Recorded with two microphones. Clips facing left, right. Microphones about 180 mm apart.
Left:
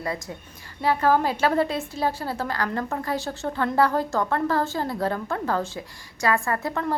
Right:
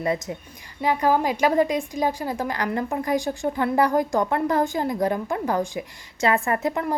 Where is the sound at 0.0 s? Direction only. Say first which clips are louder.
Right 5 dB; 20° right (ahead or behind).